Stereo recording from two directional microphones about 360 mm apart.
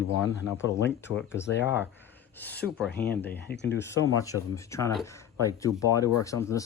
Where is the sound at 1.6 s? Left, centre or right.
Centre.